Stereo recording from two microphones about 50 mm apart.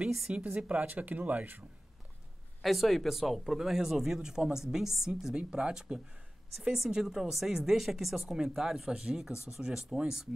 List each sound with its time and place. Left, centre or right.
0.3 s speech: right
2.6 s speech: centre